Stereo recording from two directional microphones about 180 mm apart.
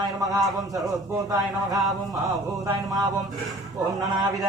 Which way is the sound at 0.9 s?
20° right (ahead or behind).